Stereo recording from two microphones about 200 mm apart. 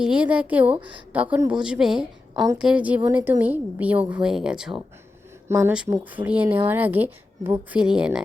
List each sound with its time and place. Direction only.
0.0 s speech: 5° right (ahead or behind)
0.8 s a woman's voice: 25° right (ahead or behind)
1.1 s a woman's voice: 5° right (ahead or behind)
2.3 s a woman's voice: 20° right (ahead or behind)
2.6 s a woman's voice: 5° right (ahead or behind)